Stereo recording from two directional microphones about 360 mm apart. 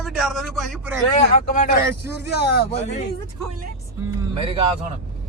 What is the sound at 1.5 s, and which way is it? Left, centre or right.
Speech, left.